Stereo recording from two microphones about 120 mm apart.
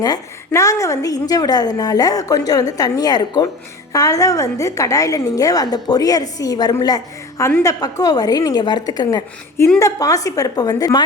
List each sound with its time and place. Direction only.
0.0 s a woman's voice: 30° left (ahead or behind)